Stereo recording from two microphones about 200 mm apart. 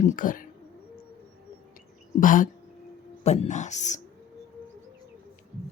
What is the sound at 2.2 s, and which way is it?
Speech, 40° left (ahead or behind).